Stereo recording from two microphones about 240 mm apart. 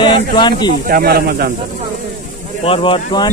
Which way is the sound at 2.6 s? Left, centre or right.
Left.